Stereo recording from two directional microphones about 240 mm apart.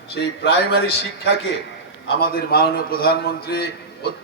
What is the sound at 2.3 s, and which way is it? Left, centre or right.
A man's voice, left.